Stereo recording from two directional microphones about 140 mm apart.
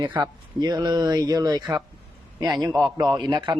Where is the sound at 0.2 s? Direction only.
30° right (ahead or behind).